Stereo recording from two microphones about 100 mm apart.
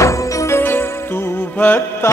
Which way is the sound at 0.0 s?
30° left (ahead or behind).